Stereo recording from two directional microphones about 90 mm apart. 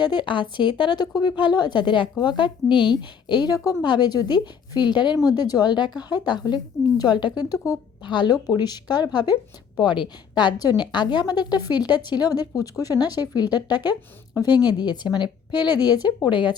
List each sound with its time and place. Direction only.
0.0 s speech: 60° left (ahead or behind); by 3.8 s 40° left (ahead or behind)
3.8 s a woman's voice: 55° left (ahead or behind)
7.5 s a woman's voice: 35° left (ahead or behind)
8.0 s a woman's voice: 60° left (ahead or behind)